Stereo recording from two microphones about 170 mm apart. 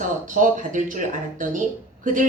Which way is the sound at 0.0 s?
50° right (ahead or behind).